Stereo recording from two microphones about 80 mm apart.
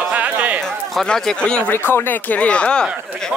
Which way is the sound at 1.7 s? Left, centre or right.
Left.